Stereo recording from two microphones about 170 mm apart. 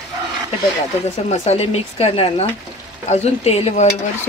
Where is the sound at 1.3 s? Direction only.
40° left (ahead or behind).